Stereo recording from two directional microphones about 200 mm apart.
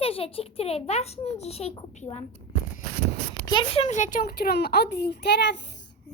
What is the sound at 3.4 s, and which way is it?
A child's voice, 25° left (ahead or behind).